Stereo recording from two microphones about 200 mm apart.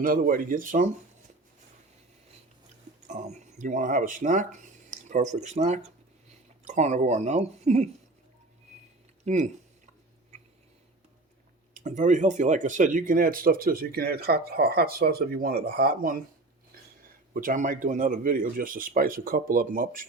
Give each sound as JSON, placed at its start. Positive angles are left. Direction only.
{"t": 0.0, "sound": "speech", "side_deg": -45}
{"t": 3.1, "sound": "speech", "side_deg": -35}
{"t": 9.2, "sound": "speech", "side_deg": -35}
{"t": 11.7, "sound": "speech", "side_deg": -40}
{"t": 17.3, "sound": "speech", "side_deg": -45}